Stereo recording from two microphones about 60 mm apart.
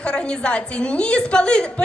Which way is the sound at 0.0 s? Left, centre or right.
Centre.